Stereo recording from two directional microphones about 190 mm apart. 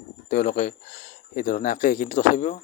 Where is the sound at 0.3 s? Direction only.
40° left (ahead or behind).